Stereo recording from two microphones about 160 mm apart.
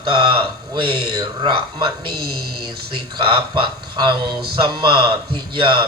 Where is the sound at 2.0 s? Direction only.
75° right (ahead or behind).